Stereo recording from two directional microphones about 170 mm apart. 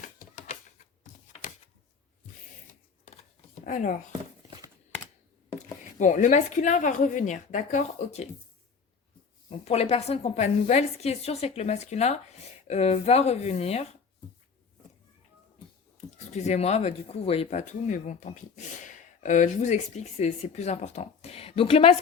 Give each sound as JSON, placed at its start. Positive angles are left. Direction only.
{"t": 1.4, "sound": "a sound", "side_deg": 40}
{"t": 3.6, "sound": "speech", "side_deg": 50}
{"t": 4.4, "sound": "a sound", "side_deg": -25}
{"t": 6.0, "sound": "a woman's voice", "side_deg": 45}
{"t": 9.5, "sound": "a woman's voice", "side_deg": 35}
{"t": 16.0, "sound": "speech", "side_deg": 40}